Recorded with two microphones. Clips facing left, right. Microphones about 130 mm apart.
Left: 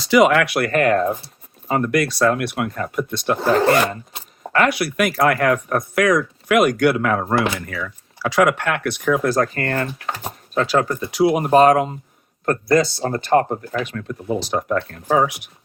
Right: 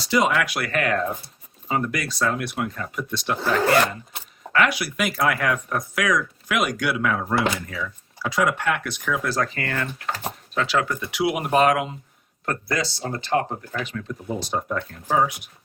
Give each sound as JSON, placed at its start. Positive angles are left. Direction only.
{"t": 0.1, "sound": "speech", "side_deg": 90}
{"t": 0.3, "sound": "speech", "side_deg": 55}
{"t": 1.6, "sound": "speech", "side_deg": 50}
{"t": 3.6, "sound": "dog", "side_deg": 30}
{"t": 4.7, "sound": "speech", "side_deg": 60}
{"t": 14.3, "sound": "speech", "side_deg": 90}